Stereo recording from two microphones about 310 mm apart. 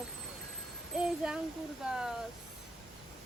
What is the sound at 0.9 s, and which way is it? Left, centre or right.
Speech, centre.